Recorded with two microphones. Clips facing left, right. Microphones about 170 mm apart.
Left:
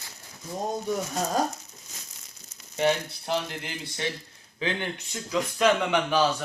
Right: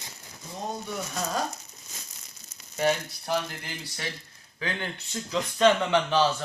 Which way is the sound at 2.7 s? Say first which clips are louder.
Left 1 dB; 25° left (ahead or behind).